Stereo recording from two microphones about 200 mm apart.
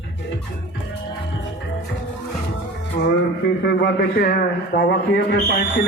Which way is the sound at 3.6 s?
55° left (ahead or behind).